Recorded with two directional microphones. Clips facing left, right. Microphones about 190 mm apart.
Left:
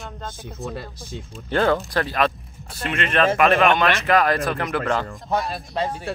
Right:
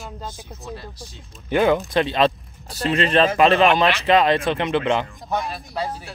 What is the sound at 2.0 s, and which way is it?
Speech, 25° right (ahead or behind).